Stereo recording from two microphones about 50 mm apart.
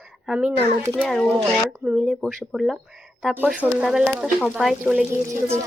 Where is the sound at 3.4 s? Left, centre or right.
Right.